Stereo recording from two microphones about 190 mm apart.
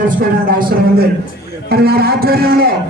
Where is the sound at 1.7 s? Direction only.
55° right (ahead or behind).